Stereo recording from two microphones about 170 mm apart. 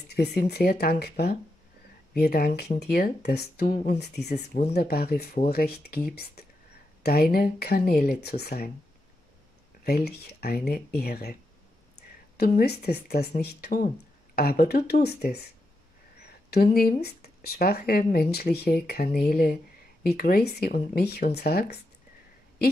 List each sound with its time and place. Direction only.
0.1 s speech: 75° left (ahead or behind)
3.9 s speech: 75° left (ahead or behind)
9.8 s speech: 65° left (ahead or behind)
12.4 s speech: 70° left (ahead or behind)